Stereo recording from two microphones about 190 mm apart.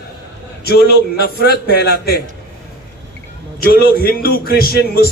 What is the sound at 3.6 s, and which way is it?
A man's voice, 50° left (ahead or behind).